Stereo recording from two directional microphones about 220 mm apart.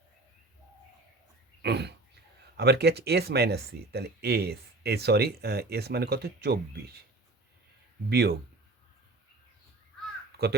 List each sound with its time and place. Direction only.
1.6 s speech: 50° right (ahead or behind)
8.1 s speech: 45° right (ahead or behind)